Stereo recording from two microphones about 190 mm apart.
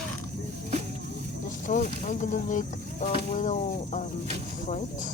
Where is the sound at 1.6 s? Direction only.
45° left (ahead or behind).